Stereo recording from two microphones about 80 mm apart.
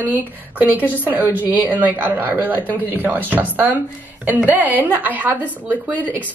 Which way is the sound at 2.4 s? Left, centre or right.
Left.